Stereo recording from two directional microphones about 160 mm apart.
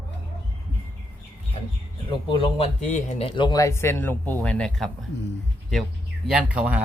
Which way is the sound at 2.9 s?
50° left (ahead or behind).